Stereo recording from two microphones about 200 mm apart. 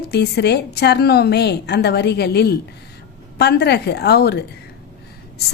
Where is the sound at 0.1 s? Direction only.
55° left (ahead or behind).